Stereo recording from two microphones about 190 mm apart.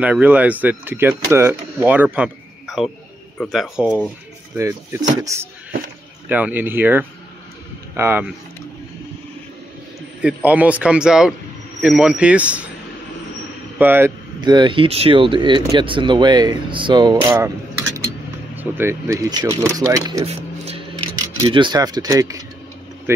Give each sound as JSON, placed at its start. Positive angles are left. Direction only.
{"t": 0.0, "sound": "speech", "side_deg": -10}
{"t": 4.6, "sound": "speech", "side_deg": -15}
{"t": 10.2, "sound": "speech", "side_deg": -10}
{"t": 13.7, "sound": "speech", "side_deg": -10}
{"t": 14.4, "sound": "speech", "side_deg": -25}
{"t": 18.6, "sound": "speech", "side_deg": -10}
{"t": 20.2, "sound": "a sound", "side_deg": -35}
{"t": 21.4, "sound": "speech", "side_deg": -25}